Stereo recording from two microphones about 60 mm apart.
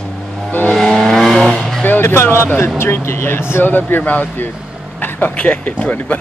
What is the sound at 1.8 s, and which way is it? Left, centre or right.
Speech, left.